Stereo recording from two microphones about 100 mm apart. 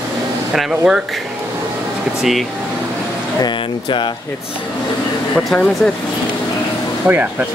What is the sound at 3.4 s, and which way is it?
Speech, 50° left (ahead or behind).